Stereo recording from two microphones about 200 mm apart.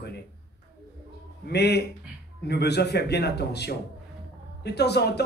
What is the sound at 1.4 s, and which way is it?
A man's voice, 55° left (ahead or behind).